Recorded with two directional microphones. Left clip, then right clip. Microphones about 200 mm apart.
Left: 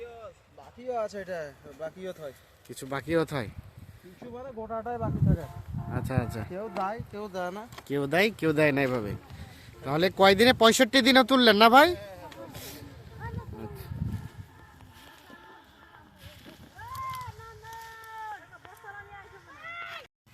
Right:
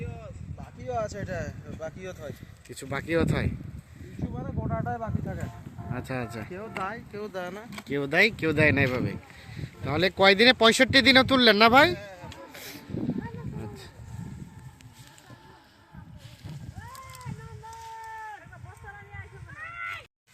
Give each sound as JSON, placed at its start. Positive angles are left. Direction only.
{"t": 0.9, "sound": "speech", "side_deg": 10}
{"t": 4.4, "sound": "speech", "side_deg": 25}
{"t": 5.9, "sound": "speech", "side_deg": 0}
{"t": 6.5, "sound": "speech", "side_deg": 55}
{"t": 7.8, "sound": "speech", "side_deg": 5}
{"t": 12.5, "sound": "a sound", "side_deg": 30}